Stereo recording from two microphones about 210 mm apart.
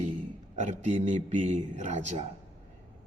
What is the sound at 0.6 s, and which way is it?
Mantra, 35° right (ahead or behind).